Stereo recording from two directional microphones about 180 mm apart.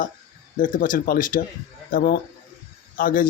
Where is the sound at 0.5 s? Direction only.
50° left (ahead or behind).